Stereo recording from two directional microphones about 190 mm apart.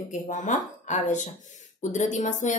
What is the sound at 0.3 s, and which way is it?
Speech, 40° left (ahead or behind).